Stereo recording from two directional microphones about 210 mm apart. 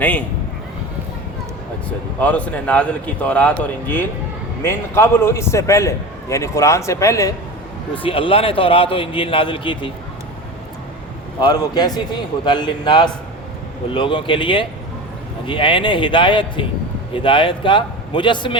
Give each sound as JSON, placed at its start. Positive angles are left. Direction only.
{"t": 2.1, "sound": "a man's voice", "side_deg": 5}
{"t": 11.3, "sound": "a man's voice", "side_deg": 20}